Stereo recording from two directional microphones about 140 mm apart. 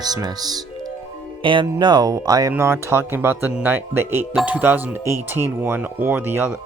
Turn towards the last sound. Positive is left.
turn(degrees=-15)  # may be behind; listen again after turning